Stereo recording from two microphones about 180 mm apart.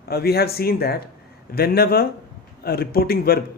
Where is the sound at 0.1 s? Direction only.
60° left (ahead or behind).